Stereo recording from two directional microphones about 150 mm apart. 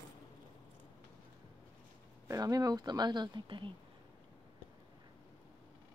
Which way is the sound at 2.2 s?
25° right (ahead or behind).